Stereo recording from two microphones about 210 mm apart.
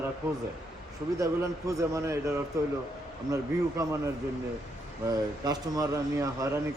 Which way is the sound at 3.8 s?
15° right (ahead or behind).